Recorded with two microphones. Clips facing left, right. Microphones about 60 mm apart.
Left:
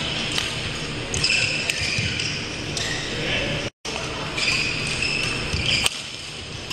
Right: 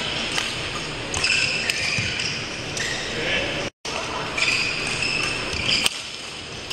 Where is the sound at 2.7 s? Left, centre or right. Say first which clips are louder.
Right 2 dB; centre.